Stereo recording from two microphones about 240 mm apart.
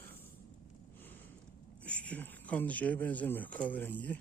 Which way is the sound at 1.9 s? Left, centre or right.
Centre.